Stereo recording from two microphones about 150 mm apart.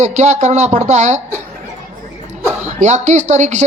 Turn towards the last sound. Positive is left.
turn(degrees=-50)  # may be behind; listen again after turning